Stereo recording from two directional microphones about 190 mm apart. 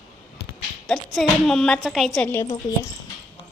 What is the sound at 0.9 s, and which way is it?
Speech, centre (ahead or behind).